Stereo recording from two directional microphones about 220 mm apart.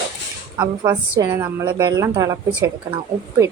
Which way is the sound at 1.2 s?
15° right (ahead or behind).